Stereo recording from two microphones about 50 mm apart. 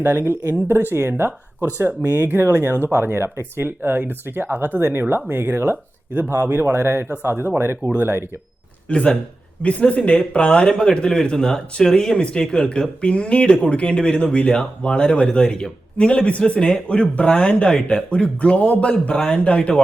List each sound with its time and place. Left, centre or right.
0.0 s speech: right
4.8 s speech: right
8.9 s speech: centre